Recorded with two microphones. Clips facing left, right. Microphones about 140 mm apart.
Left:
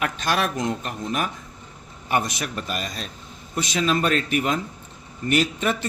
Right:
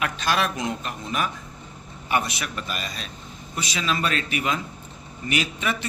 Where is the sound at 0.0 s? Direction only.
45° left (ahead or behind).